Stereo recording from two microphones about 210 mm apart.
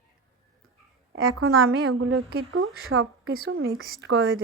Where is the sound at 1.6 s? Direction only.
75° right (ahead or behind).